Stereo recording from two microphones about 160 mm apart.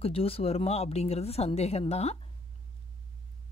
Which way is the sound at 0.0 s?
35° left (ahead or behind).